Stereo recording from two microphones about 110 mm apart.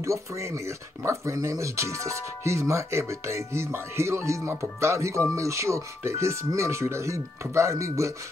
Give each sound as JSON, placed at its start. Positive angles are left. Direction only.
{"t": 0.0, "sound": "speech", "side_deg": -25}